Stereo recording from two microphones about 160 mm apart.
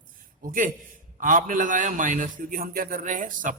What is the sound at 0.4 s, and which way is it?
A man's voice, 55° right (ahead or behind).